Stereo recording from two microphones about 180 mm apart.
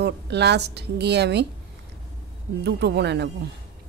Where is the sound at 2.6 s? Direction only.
70° right (ahead or behind).